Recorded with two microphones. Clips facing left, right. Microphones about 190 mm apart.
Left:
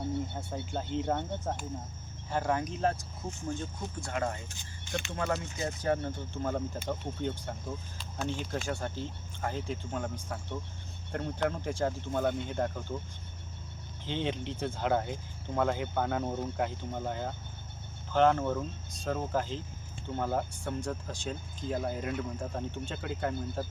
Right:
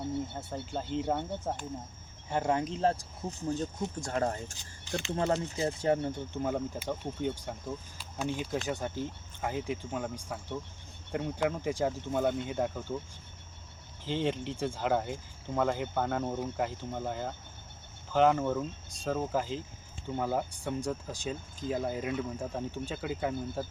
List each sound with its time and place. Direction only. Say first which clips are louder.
0.3 s speech: even; 5° right (ahead or behind)
2.3 s speech: right 1 dB; 25° right (ahead or behind)
6.4 s speech: even; 10° right (ahead or behind)
14.0 s speech: right 2 dB; 5° right (ahead or behind)